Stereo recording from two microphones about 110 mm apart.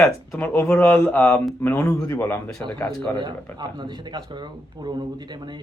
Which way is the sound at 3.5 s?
45° right (ahead or behind).